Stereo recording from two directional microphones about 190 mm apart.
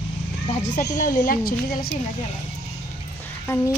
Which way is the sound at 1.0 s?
40° left (ahead or behind).